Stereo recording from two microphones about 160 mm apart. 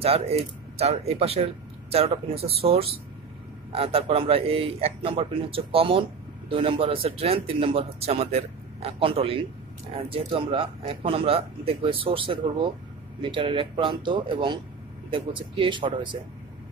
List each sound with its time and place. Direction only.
0.0 s speech: 40° right (ahead or behind)